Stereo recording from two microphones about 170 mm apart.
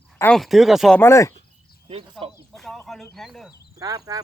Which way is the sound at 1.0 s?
15° left (ahead or behind).